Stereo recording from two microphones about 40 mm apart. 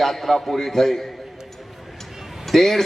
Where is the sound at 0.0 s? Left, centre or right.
Centre.